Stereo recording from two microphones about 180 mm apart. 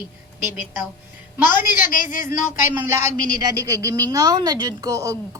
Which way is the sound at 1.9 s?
50° left (ahead or behind).